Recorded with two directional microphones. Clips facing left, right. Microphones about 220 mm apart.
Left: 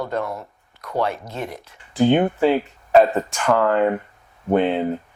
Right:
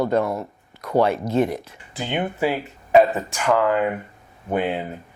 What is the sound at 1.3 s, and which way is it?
Speech, 25° right (ahead or behind).